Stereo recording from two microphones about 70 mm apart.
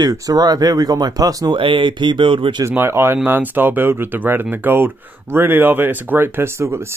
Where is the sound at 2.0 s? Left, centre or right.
Right.